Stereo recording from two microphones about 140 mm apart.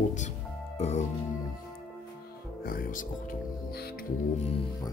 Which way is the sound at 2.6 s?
90° left.